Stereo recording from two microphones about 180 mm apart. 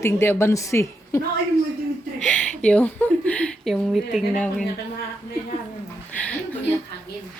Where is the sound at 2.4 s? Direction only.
5° left (ahead or behind).